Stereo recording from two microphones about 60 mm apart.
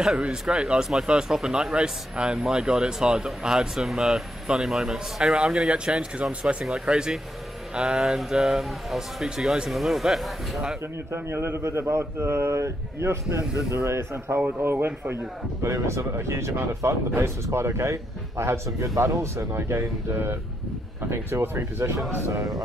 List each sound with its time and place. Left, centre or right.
0.0 s speech: centre
11.2 s speech: right
15.6 s speech: right